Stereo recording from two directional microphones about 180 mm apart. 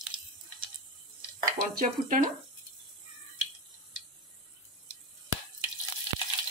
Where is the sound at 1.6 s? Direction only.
50° right (ahead or behind).